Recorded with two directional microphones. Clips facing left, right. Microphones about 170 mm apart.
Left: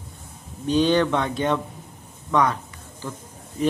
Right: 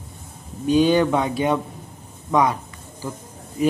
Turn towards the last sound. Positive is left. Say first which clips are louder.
# right 3 dB
turn(degrees=-10)  # may be behind; listen again after turning